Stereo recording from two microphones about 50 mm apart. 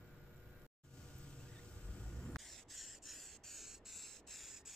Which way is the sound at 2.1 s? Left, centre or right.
Centre.